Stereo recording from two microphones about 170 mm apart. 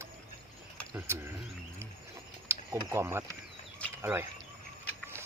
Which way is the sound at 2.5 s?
15° right (ahead or behind).